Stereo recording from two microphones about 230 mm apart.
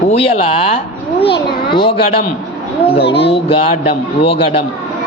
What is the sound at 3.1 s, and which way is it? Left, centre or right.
Speech, left.